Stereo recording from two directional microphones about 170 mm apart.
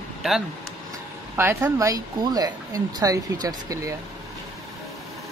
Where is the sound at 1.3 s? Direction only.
15° right (ahead or behind).